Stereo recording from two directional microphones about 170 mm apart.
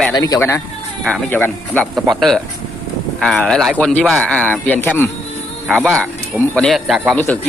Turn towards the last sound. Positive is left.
turn(degrees=0)  # may be behind; listen again after turning